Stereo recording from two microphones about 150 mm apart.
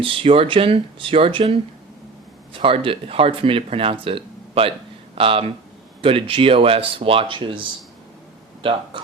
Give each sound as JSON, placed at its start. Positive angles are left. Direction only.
{"t": 0.0, "sound": "speech", "side_deg": -35}